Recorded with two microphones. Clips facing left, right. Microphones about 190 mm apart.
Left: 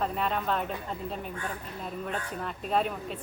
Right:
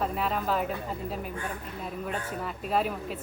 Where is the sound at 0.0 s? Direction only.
5° right (ahead or behind).